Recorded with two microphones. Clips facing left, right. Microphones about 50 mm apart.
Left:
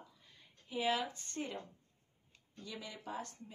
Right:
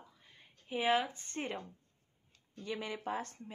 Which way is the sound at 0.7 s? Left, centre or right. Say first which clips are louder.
Right 4 dB; right.